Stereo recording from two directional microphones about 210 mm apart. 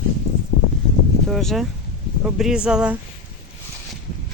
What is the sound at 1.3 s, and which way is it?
Speech, centre (ahead or behind).